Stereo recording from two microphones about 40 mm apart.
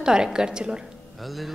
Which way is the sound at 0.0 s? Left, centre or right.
Centre.